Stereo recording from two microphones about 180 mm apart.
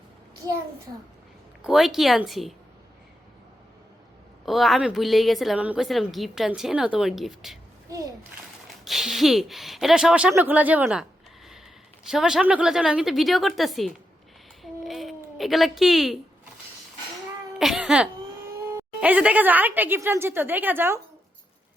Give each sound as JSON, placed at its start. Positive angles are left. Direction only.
{"t": 1.6, "sound": "a woman's voice", "side_deg": 0}
{"t": 4.4, "sound": "a woman's voice", "side_deg": 0}
{"t": 7.9, "sound": "a child's voice", "side_deg": -20}
{"t": 8.8, "sound": "a woman's voice", "side_deg": 0}
{"t": 12.0, "sound": "a woman's voice", "side_deg": -5}
{"t": 14.6, "sound": "a sound", "side_deg": 0}
{"t": 17.6, "sound": "a sound", "side_deg": -5}
{"t": 18.8, "sound": "a woman's voice", "side_deg": -10}